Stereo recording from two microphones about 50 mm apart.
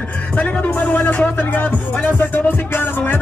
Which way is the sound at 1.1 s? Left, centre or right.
Left.